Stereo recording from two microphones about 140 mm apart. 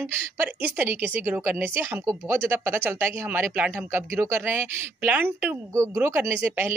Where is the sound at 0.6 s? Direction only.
15° right (ahead or behind).